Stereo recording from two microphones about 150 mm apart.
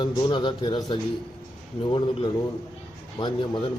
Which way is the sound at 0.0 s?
30° left (ahead or behind).